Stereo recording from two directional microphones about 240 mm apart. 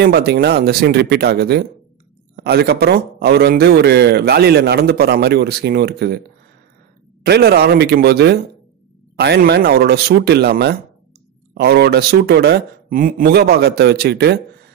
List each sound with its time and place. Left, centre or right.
0.0 s speech: right
7.2 s speech: right